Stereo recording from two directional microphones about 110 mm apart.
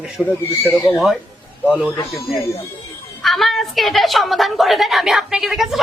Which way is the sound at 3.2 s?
Centre (ahead or behind).